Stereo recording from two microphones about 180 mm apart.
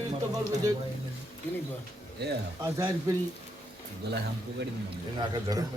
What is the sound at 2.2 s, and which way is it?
Speech, 65° right (ahead or behind).